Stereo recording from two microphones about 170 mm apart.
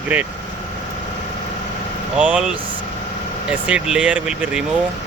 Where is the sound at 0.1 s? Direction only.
10° right (ahead or behind).